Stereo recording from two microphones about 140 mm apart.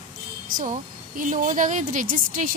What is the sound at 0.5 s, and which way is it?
A woman's voice, 70° right (ahead or behind).